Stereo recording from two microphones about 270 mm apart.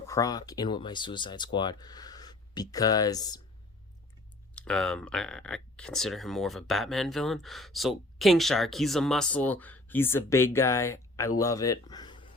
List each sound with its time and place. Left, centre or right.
0.1 s speech: centre
4.5 s speech: centre